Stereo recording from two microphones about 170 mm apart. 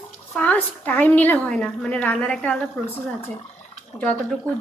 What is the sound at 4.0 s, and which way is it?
Speech, 10° left (ahead or behind).